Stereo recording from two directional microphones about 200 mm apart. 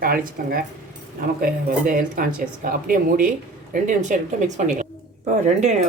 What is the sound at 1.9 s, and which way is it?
Speech, 45° right (ahead or behind).